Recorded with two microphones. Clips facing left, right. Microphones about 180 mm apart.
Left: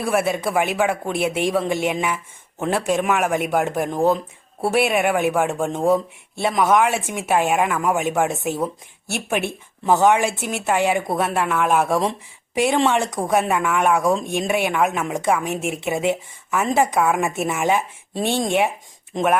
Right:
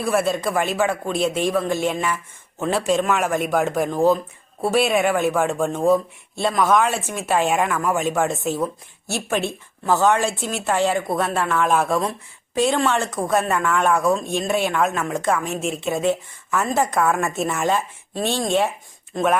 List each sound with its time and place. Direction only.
0.0 s a woman's voice: 10° left (ahead or behind)
9.4 s speech: 65° left (ahead or behind)
9.8 s a woman's voice: 15° left (ahead or behind)